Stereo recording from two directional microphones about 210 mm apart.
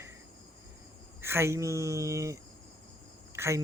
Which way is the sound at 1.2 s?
10° right (ahead or behind).